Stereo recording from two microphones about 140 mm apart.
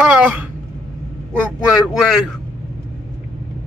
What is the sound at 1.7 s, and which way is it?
Speech, 5° right (ahead or behind).